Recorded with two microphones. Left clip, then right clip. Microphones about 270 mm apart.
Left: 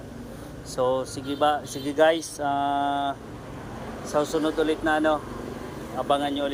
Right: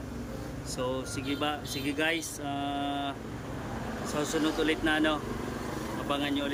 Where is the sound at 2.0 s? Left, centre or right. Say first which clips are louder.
Left 12 dB; centre.